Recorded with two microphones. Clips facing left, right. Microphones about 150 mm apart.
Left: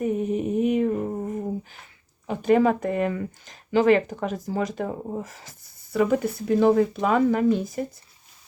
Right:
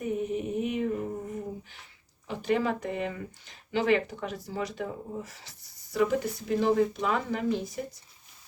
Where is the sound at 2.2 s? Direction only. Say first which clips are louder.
Left 8 dB; 55° left (ahead or behind).